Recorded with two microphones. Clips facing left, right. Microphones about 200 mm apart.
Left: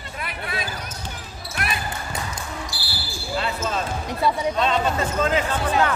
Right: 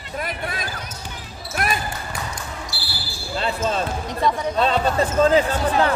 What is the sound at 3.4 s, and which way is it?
Speech, 30° right (ahead or behind).